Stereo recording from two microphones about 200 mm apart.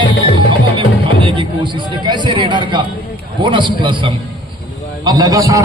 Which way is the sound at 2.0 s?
25° right (ahead or behind).